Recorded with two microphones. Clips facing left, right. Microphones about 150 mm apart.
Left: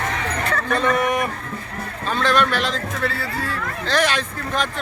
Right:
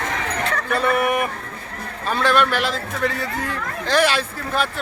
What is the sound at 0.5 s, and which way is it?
A man's voice, 10° right (ahead or behind).